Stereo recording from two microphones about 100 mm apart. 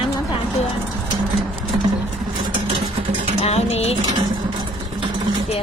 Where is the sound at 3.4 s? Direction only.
90° left.